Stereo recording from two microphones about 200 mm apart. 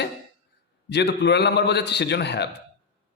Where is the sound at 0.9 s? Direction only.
60° left (ahead or behind).